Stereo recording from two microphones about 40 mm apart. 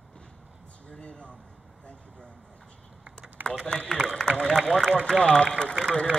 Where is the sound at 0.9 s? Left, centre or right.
Left.